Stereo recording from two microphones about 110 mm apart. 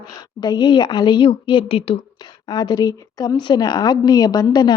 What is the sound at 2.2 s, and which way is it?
A woman's voice, 40° left (ahead or behind).